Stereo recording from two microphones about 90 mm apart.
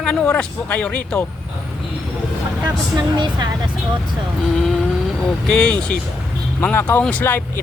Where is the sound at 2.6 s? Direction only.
55° right (ahead or behind).